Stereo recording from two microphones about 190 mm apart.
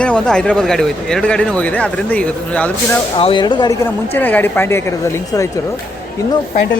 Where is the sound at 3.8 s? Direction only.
10° left (ahead or behind).